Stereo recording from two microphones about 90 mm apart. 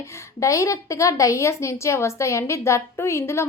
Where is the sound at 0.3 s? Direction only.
35° left (ahead or behind).